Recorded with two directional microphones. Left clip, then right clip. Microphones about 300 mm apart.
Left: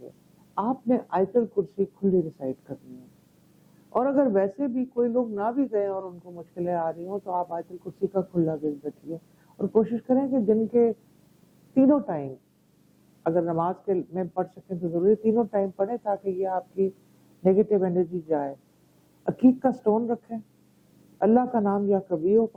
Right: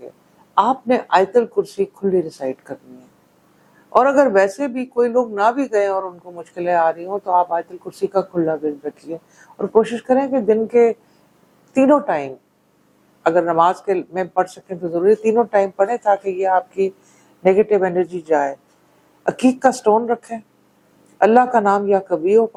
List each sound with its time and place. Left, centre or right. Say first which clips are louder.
0.5 s speech: right 11 dB; centre
3.8 s speech: right 10 dB; centre